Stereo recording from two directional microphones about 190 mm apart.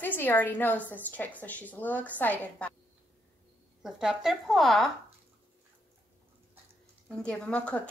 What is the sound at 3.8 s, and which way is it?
A woman's voice, centre (ahead or behind).